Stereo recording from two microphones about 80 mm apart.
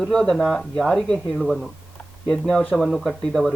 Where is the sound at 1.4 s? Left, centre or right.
Centre.